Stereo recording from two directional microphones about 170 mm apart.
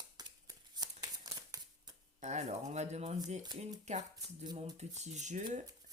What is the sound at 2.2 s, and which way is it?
Speech, 45° right (ahead or behind).